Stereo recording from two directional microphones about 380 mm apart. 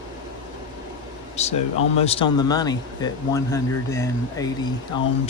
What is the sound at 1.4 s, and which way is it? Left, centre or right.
Speech, centre.